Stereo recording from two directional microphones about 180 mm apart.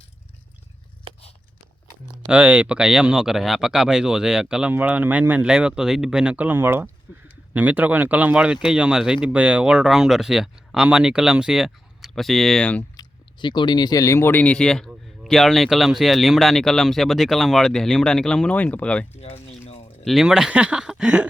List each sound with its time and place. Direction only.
2.3 s speech: 5° right (ahead or behind)
13.0 s speech: 25° left (ahead or behind); by 19.0 s 5° left (ahead or behind)
19.1 s a sound: 35° left (ahead or behind)
20.1 s speech: centre (ahead or behind)